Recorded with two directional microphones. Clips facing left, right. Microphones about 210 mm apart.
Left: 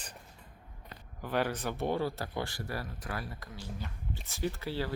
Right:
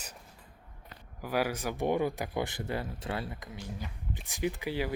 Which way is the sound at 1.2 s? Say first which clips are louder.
Right 1 dB; 10° right (ahead or behind).